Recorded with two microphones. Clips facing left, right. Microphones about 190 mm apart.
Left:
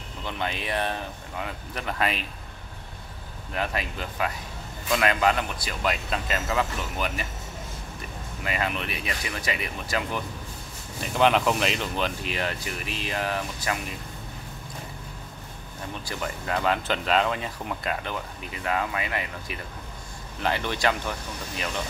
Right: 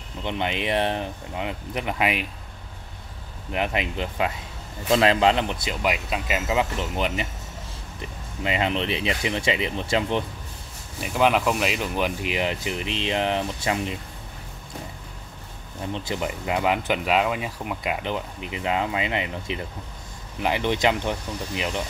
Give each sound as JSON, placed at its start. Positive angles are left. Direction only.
{"t": 0.2, "sound": "speech", "side_deg": -20}
{"t": 3.5, "sound": "speech", "side_deg": -20}
{"t": 8.5, "sound": "speech", "side_deg": -25}
{"t": 11.0, "sound": "speech", "side_deg": -5}
{"t": 15.9, "sound": "speech", "side_deg": -20}
{"t": 18.0, "sound": "speech", "side_deg": -20}